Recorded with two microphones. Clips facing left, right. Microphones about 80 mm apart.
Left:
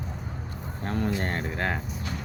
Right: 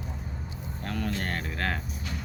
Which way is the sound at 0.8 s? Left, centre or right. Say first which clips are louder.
Left 4 dB; left.